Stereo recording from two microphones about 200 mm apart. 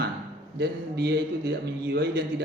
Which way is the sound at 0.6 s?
55° right (ahead or behind).